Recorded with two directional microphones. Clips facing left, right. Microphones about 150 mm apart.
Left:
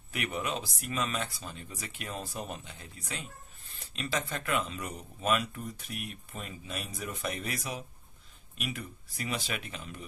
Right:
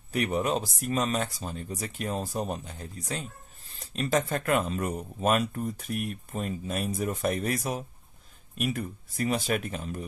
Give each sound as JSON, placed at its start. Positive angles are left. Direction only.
{"t": 0.1, "sound": "speech", "side_deg": -40}